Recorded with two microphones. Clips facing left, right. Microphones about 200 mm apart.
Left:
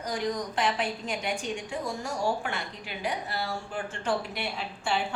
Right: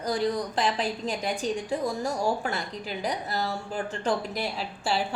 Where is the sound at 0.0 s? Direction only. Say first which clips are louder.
Right 4 dB; 35° right (ahead or behind).